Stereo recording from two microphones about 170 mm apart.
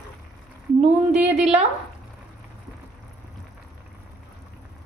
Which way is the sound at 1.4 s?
40° right (ahead or behind).